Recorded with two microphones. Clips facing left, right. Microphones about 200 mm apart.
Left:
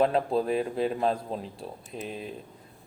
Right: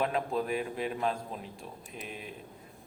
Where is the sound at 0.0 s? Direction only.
30° left (ahead or behind).